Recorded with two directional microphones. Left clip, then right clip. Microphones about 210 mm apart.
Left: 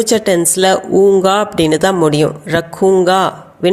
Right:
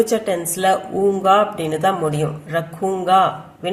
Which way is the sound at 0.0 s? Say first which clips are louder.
Left 6 dB; 40° left (ahead or behind).